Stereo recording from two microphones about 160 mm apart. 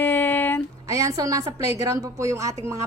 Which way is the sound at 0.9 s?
20° right (ahead or behind).